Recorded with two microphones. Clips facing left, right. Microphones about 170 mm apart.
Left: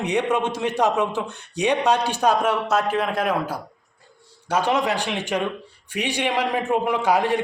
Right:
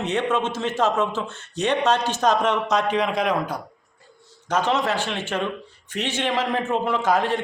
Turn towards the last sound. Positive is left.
turn(degrees=10)  # may be behind; listen again after turning